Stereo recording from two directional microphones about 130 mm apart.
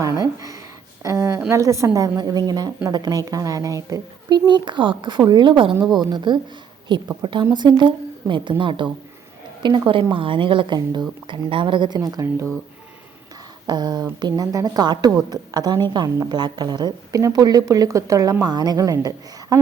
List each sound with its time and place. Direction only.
0.0 s a woman's voice: 25° right (ahead or behind)
1.0 s a sound: 25° right (ahead or behind)
1.5 s a woman's voice: 25° right (ahead or behind)
4.3 s a woman's voice: 35° right (ahead or behind)
13.7 s a woman's voice: 35° right (ahead or behind)